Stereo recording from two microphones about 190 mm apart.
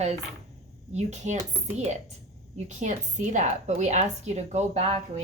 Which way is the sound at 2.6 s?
40° right (ahead or behind).